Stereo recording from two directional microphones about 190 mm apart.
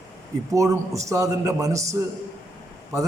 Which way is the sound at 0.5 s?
15° right (ahead or behind).